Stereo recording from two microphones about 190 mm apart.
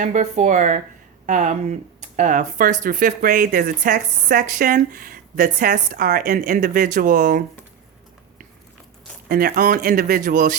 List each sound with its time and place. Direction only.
0.0 s speech: 40° right (ahead or behind)
9.3 s speech: 50° right (ahead or behind)